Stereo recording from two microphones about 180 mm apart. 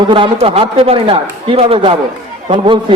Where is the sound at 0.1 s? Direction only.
30° right (ahead or behind).